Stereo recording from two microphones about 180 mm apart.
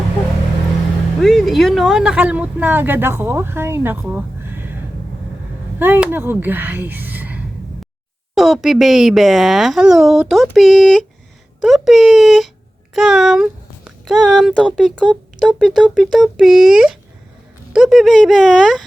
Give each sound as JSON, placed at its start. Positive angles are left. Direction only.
{"t": 1.2, "sound": "speech", "side_deg": 0}
{"t": 5.8, "sound": "speech", "side_deg": -10}